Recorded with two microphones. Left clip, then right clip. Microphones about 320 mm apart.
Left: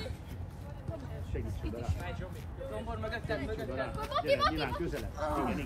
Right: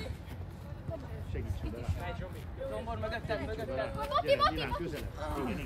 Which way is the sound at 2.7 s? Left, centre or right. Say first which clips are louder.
Right 1 dB; right.